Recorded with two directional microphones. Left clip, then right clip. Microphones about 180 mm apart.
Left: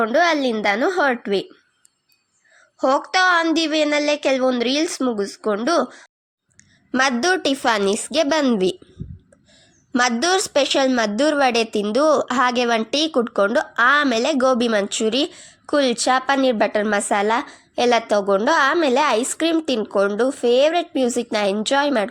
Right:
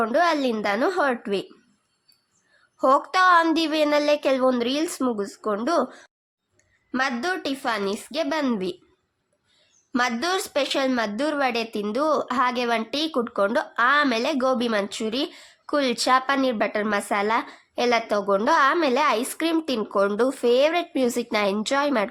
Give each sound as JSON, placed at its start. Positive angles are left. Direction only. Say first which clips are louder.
{"t": 0.0, "sound": "speech", "louder": "left 4 dB", "side_deg": 15}
{"t": 2.7, "sound": "speech", "louder": "left 1 dB", "side_deg": 10}
{"t": 6.9, "sound": "a woman's voice", "louder": "left 7 dB", "side_deg": 35}
{"t": 10.0, "sound": "a woman's voice", "louder": "left 6 dB", "side_deg": 30}